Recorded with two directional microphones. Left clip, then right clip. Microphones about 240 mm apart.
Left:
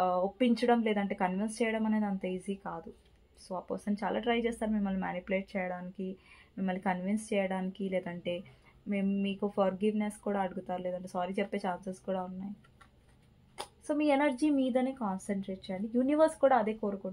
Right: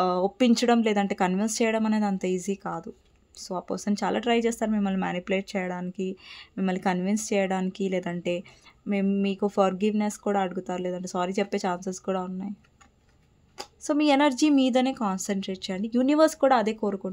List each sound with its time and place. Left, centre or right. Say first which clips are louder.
0.0 s speech: right 5 dB; right
13.8 s speech: right 7 dB; right